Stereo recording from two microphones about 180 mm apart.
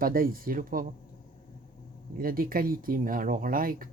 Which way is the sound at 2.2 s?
50° right (ahead or behind).